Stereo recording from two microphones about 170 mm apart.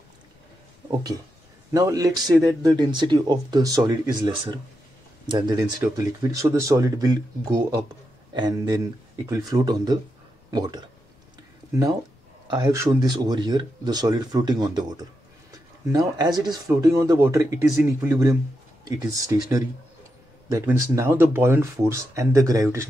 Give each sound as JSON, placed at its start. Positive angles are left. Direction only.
{"t": 1.7, "sound": "speech", "side_deg": -20}
{"t": 12.4, "sound": "speech", "side_deg": -25}